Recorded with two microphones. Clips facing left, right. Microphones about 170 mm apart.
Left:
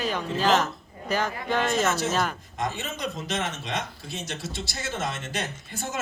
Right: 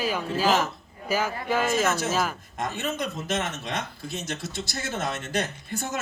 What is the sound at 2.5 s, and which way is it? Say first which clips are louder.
Speech: right 4 dB; 50° right (ahead or behind).